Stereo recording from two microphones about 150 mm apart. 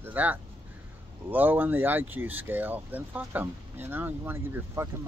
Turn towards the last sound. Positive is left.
turn(degrees=-15)  # may be behind; listen again after turning